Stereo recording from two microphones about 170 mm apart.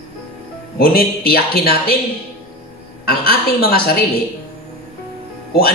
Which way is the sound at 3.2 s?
65° left (ahead or behind).